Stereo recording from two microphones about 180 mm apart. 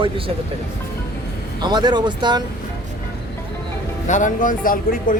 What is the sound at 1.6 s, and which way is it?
Speech, 25° right (ahead or behind).